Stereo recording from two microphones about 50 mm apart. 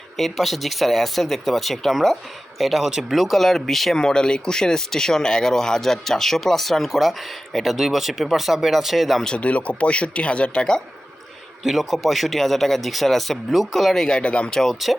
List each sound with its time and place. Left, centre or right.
0.2 s speech: centre
9.4 s speech: left
11.6 s speech: centre
14.2 s speech: left
14.5 s speech: centre